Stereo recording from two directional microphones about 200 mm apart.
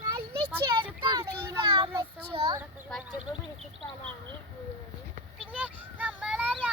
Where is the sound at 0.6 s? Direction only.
20° right (ahead or behind).